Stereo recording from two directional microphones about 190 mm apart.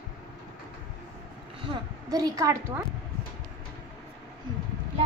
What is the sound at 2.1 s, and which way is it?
Speech, 20° right (ahead or behind).